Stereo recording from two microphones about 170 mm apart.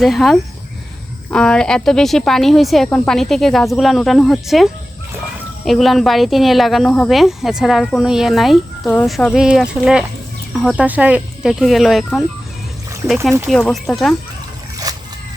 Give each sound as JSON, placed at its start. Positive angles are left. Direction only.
{"t": 0.0, "sound": "speech", "side_deg": 0}
{"t": 13.5, "sound": "speech", "side_deg": 5}
{"t": 14.9, "sound": "a sound", "side_deg": -20}